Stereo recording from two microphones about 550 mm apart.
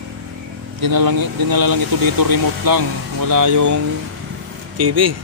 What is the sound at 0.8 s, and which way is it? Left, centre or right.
Speech, right.